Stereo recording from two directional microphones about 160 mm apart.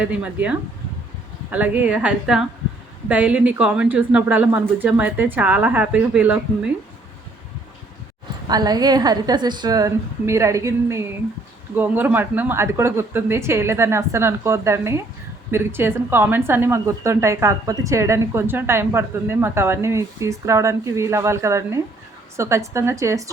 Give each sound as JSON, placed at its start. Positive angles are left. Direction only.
{"t": 0.0, "sound": "a woman's voice", "side_deg": -10}
{"t": 8.4, "sound": "a woman's voice", "side_deg": -25}